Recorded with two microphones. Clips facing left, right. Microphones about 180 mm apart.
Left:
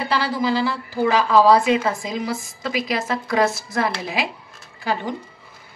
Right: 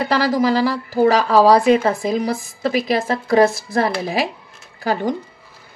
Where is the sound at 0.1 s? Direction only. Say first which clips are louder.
Right 4 dB; 40° right (ahead or behind).